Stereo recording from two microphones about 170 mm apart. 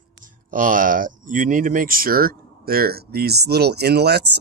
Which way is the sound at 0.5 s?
50° right (ahead or behind).